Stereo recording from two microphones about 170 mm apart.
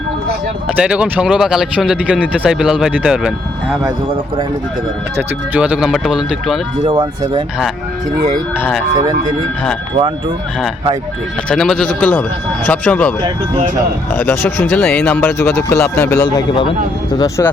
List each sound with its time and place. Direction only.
0.8 s speech: 5° right (ahead or behind)
5.1 s speech: 5° right (ahead or behind)
6.8 s speech: 25° right (ahead or behind)
11.4 s speech: centre (ahead or behind); by 17.5 s 15° left (ahead or behind)